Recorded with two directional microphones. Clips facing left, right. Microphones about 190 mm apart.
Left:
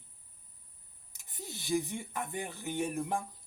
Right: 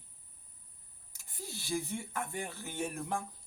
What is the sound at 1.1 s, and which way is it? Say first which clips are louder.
Speech: even; 20° left (ahead or behind).